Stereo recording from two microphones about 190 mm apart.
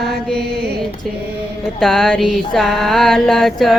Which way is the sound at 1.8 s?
5° left (ahead or behind).